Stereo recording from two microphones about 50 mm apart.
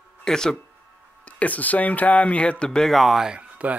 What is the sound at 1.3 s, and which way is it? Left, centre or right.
Speech, left.